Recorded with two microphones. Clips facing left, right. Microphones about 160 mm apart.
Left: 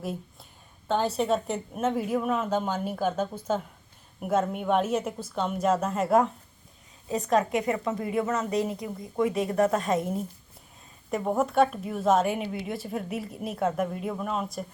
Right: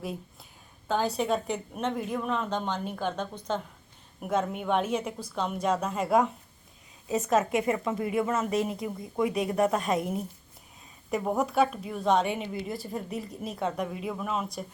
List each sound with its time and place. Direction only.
0.9 s a woman's voice: centre (ahead or behind)
7.1 s speech: 20° right (ahead or behind)
11.1 s a woman's voice: centre (ahead or behind)